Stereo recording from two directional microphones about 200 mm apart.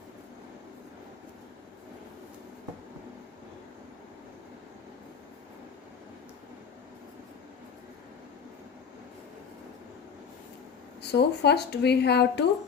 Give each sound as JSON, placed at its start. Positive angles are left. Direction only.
{"t": 11.0, "sound": "speech", "side_deg": 55}